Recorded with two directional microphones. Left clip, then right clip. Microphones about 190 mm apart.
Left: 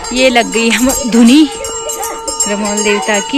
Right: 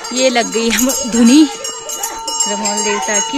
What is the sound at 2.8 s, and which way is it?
Speech, centre (ahead or behind).